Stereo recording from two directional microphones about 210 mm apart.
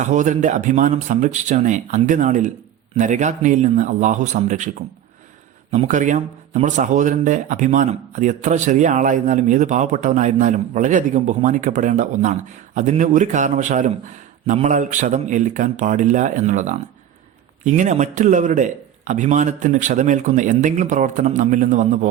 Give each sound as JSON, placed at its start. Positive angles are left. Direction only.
{"t": 0.0, "sound": "speech", "side_deg": -35}